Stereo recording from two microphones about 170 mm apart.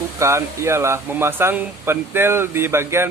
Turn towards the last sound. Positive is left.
turn(degrees=-15)  # may be behind; listen again after turning